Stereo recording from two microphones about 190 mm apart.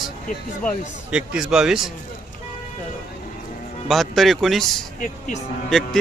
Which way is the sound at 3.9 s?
Centre (ahead or behind).